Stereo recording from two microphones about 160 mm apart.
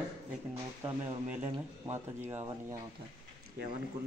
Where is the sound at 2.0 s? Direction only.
15° right (ahead or behind).